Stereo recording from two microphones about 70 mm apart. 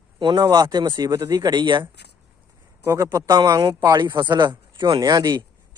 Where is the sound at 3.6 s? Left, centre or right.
Right.